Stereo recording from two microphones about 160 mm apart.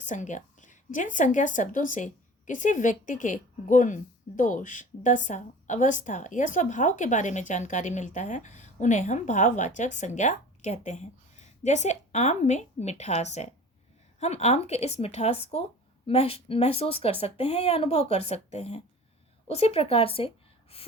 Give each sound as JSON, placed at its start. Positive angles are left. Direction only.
{"t": 0.0, "sound": "a woman's voice", "side_deg": 50}